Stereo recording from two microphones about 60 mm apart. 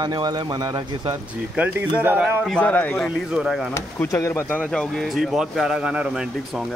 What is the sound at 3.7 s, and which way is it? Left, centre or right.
Speech, left.